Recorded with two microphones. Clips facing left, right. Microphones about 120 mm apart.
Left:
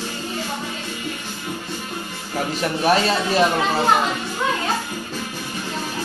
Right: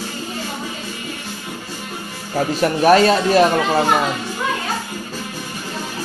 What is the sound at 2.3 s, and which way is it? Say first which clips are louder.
Music: right 6 dB; 35° right (ahead or behind).